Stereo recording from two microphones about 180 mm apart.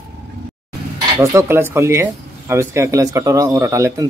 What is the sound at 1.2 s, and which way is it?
Speech, 15° right (ahead or behind).